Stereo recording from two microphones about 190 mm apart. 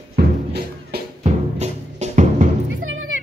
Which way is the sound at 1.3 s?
35° right (ahead or behind).